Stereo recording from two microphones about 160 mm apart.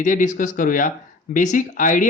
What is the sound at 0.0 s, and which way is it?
Speech, 55° left (ahead or behind).